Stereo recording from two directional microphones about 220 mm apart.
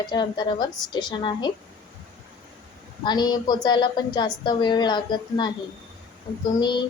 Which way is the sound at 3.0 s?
20° left (ahead or behind).